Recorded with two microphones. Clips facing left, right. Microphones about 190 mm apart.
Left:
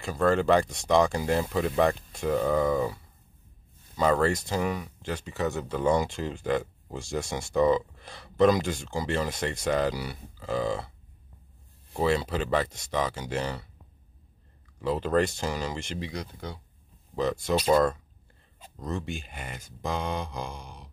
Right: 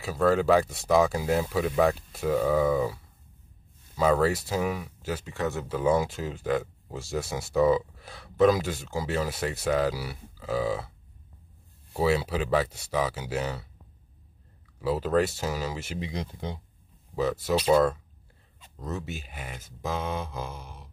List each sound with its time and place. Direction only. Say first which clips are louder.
0.0 s speech: right 1 dB; 5° right (ahead or behind)
11.9 s speech: right 1 dB; 5° right (ahead or behind)
14.8 s speech: even; 5° right (ahead or behind)
16.0 s speech: right 2 dB; 25° right (ahead or behind)
17.1 s speech: even; 5° right (ahead or behind)